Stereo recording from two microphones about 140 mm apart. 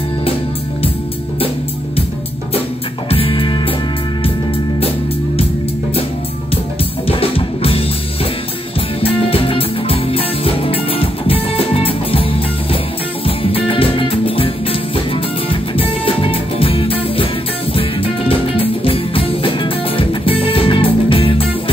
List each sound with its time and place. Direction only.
3.1 s music: 40° left (ahead or behind)
7.1 s music: 45° left (ahead or behind)
9.0 s music: 40° left (ahead or behind)
13.4 s music: 40° left (ahead or behind)
18.6 s music: 40° left (ahead or behind)